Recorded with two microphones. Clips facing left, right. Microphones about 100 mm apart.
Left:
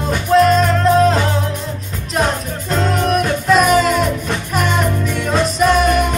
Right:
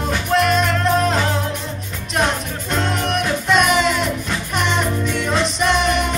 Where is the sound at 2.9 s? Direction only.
40° left (ahead or behind).